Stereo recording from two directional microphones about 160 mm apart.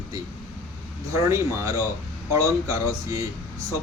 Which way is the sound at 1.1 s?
20° right (ahead or behind).